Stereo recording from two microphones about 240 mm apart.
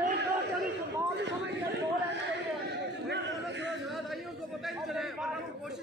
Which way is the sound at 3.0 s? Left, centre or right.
Right.